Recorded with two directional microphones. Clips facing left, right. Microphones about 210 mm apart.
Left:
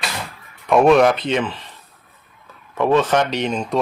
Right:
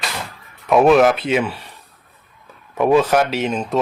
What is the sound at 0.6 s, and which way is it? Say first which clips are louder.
Speech: right 1 dB; centre (ahead or behind).